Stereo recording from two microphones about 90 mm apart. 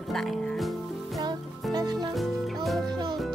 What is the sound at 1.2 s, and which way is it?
Music, 45° right (ahead or behind).